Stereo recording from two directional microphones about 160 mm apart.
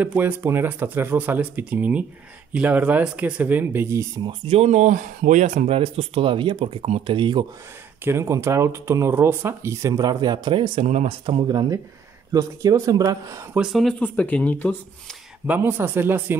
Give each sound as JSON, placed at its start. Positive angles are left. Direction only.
{"t": 0.0, "sound": "speech", "side_deg": -10}
{"t": 4.3, "sound": "speech", "side_deg": -40}
{"t": 8.0, "sound": "speech", "side_deg": -15}
{"t": 10.9, "sound": "speech", "side_deg": -45}
{"t": 11.2, "sound": "speech", "side_deg": -30}
{"t": 13.6, "sound": "speech", "side_deg": 0}
{"t": 15.4, "sound": "speech", "side_deg": -10}